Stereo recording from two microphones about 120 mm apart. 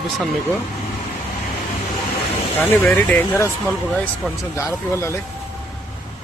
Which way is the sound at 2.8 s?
20° left (ahead or behind).